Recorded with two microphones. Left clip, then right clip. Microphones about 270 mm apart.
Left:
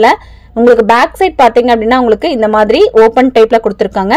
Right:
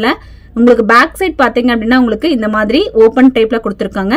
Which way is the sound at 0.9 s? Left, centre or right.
Centre.